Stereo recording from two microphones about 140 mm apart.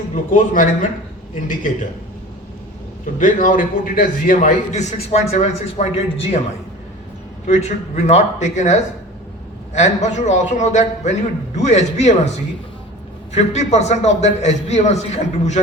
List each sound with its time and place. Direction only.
0.1 s speech: 70° left (ahead or behind)
3.2 s a man's voice: 70° left (ahead or behind); by 6.4 s 45° left (ahead or behind)
7.4 s a man's voice: 55° left (ahead or behind)
13.3 s a man's voice: 50° left (ahead or behind)